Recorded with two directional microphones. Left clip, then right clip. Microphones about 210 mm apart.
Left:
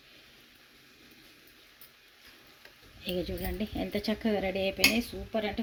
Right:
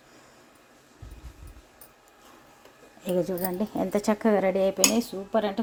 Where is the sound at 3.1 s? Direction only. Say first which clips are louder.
Right 8 dB; 45° right (ahead or behind).